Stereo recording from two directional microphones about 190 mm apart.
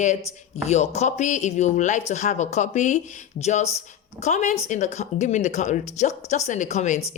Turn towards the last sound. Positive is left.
turn(degrees=40)  # may be behind; listen again after turning